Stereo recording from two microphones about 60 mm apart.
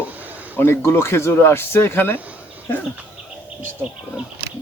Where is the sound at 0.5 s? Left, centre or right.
Left.